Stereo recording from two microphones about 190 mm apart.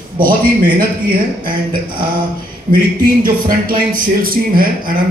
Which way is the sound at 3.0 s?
45° right (ahead or behind).